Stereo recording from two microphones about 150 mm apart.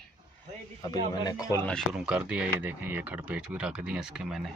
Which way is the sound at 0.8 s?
25° left (ahead or behind).